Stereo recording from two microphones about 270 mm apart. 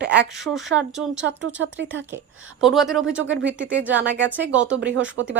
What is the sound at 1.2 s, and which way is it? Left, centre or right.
Speech, right.